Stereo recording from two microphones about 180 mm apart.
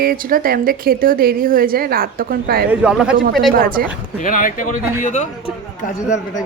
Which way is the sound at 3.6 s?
50° right (ahead or behind).